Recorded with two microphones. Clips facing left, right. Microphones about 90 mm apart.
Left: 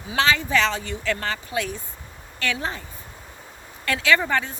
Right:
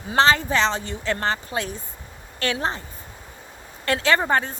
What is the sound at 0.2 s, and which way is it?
A woman's voice, 35° right (ahead or behind).